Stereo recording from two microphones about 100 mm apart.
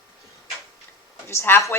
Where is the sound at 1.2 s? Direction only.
25° left (ahead or behind).